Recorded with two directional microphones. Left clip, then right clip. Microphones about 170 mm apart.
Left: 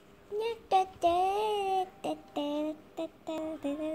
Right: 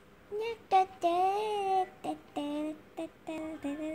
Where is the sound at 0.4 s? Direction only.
15° left (ahead or behind).